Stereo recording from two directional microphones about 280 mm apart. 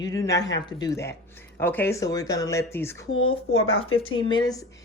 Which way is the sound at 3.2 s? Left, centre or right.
Centre.